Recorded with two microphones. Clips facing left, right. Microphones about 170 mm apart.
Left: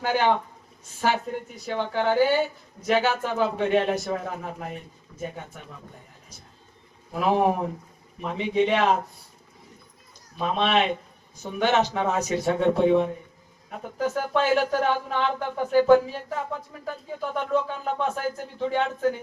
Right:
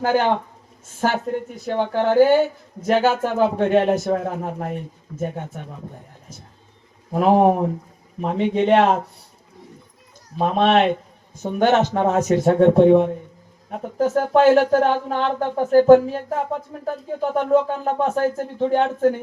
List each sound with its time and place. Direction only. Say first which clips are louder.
0.0 s speech: right 5 dB; 45° right (ahead or behind)
1.6 s speech: right 5 dB; 50° right (ahead or behind)
7.1 s speech: right 7 dB; 45° right (ahead or behind)
10.4 s speech: right 6 dB; 45° right (ahead or behind)